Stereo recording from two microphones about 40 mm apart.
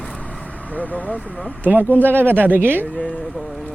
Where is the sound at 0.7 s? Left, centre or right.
Left.